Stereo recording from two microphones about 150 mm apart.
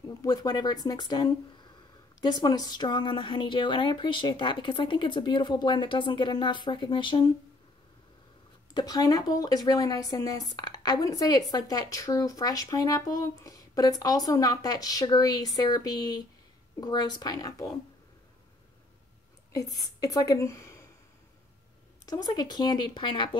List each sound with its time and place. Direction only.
0.2 s a woman's voice: 25° left (ahead or behind)
8.7 s speech: 25° left (ahead or behind)
19.5 s a woman's voice: 25° left (ahead or behind)
22.0 s speech: 25° left (ahead or behind)